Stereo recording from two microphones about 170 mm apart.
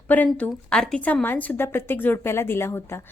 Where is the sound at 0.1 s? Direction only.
10° left (ahead or behind).